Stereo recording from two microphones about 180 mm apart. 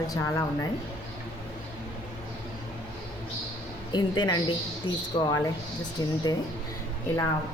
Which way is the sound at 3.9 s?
25° left (ahead or behind).